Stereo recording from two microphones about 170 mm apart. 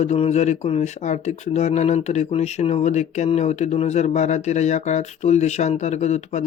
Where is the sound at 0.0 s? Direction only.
40° left (ahead or behind).